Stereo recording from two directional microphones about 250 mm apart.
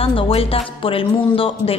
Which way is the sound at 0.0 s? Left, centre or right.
Left.